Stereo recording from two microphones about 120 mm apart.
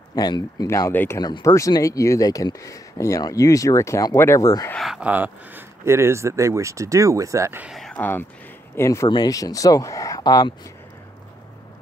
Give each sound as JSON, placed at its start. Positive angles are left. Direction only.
{"t": 0.1, "sound": "speech", "side_deg": 35}
{"t": 4.7, "sound": "speech", "side_deg": -5}
{"t": 7.6, "sound": "speech", "side_deg": 0}
{"t": 8.0, "sound": "speech", "side_deg": 15}